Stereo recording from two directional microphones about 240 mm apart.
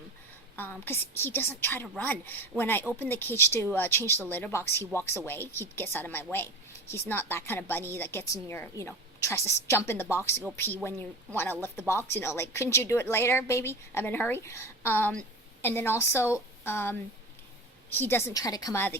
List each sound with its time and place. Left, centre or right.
0.5 s a woman's voice: centre
11.6 s a woman's voice: centre